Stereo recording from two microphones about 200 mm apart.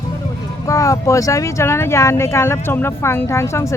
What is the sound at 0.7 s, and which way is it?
Speech, 15° left (ahead or behind).